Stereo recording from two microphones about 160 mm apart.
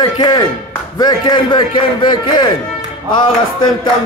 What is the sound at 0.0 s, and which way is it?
A man's voice, 25° left (ahead or behind).